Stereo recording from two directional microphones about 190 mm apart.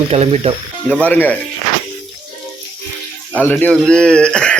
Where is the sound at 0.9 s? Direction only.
5° left (ahead or behind).